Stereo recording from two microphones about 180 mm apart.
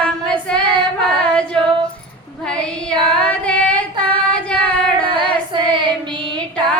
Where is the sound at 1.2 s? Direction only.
5° left (ahead or behind).